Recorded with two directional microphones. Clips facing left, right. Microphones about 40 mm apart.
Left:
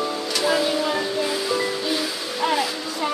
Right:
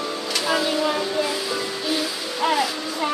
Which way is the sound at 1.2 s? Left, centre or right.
Centre.